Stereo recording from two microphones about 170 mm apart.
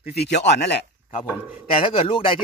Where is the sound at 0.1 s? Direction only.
70° left (ahead or behind).